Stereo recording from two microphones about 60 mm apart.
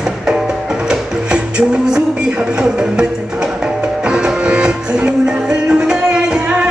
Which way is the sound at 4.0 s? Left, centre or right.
Centre.